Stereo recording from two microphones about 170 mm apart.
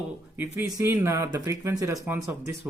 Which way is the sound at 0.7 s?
20° right (ahead or behind).